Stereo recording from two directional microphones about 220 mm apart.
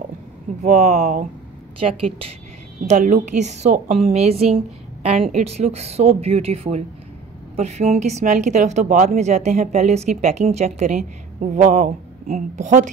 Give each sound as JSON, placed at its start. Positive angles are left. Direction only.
{"t": 0.7, "sound": "a woman's voice", "side_deg": -35}
{"t": 2.9, "sound": "a woman's voice", "side_deg": -35}